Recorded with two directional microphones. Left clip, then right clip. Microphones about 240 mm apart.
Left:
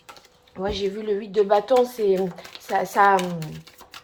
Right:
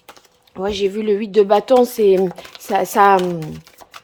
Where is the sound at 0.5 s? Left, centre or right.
Right.